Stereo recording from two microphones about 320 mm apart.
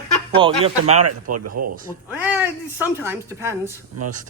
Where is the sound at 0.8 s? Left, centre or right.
Right.